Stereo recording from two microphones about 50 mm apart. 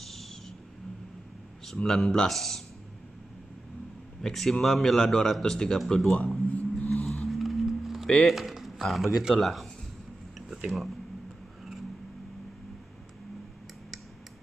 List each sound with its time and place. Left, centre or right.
0.0 s owl: centre
1.8 s a man's voice: centre
4.2 s a man's voice: centre
6.2 s a sound: left
7.2 s music: centre
8.3 s a man's voice: centre